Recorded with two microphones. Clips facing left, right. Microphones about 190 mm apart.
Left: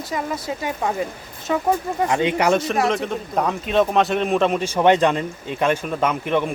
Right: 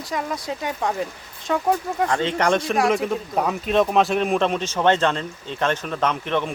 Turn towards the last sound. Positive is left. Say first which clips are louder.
# left 2 dB
turn(degrees=10)  # may be behind; listen again after turning